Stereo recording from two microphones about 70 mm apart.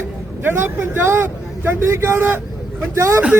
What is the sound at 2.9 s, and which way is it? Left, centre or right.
Speech, right.